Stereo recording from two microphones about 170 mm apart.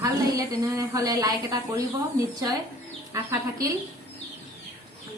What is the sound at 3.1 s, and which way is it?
Speech, 20° right (ahead or behind).